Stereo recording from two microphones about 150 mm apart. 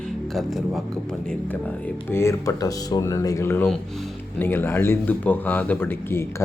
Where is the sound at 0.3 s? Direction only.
Centre (ahead or behind).